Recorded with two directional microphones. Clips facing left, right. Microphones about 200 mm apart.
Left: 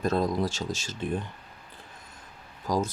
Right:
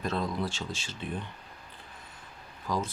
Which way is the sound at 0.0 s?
40° left (ahead or behind).